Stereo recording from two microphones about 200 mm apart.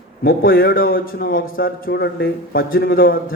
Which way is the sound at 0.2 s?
50° left (ahead or behind).